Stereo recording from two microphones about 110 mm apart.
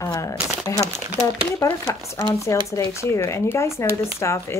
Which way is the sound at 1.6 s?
25° left (ahead or behind).